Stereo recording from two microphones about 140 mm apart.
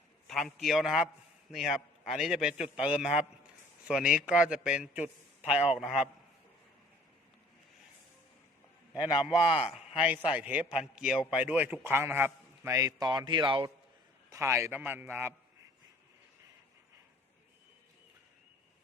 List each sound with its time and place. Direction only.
0.3 s a man's voice: centre (ahead or behind)
9.2 s a man's voice: 5° right (ahead or behind); by 13.7 s 35° right (ahead or behind)
14.3 s a man's voice: 20° right (ahead or behind)